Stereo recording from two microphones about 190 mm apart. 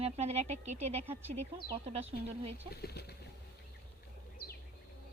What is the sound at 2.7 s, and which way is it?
Speech, 55° left (ahead or behind).